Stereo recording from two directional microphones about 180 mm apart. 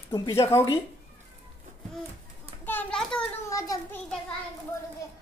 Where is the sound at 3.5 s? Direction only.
15° left (ahead or behind).